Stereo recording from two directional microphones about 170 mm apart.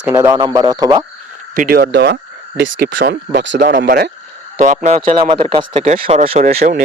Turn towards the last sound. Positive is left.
turn(degrees=-40)  # may be behind; listen again after turning